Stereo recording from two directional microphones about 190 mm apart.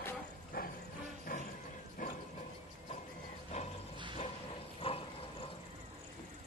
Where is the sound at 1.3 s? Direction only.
50° left (ahead or behind).